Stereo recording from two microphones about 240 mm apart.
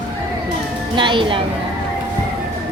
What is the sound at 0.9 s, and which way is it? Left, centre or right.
Speech, centre.